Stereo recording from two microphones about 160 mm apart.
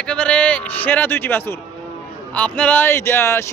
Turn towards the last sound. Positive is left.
turn(degrees=15)  # may be behind; listen again after turning